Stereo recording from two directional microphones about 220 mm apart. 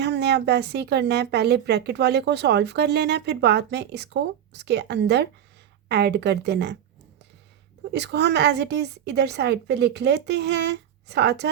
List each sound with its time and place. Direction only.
0.0 s a woman's voice: 50° right (ahead or behind)
7.9 s a woman's voice: 50° right (ahead or behind)